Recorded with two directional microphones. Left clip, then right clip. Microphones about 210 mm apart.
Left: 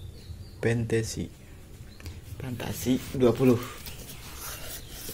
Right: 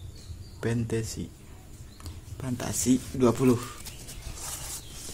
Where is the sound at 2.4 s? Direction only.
25° right (ahead or behind).